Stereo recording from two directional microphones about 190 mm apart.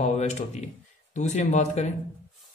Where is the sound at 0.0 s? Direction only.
35° left (ahead or behind).